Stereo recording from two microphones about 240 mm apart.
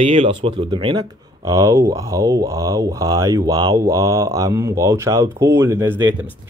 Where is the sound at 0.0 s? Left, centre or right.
Right.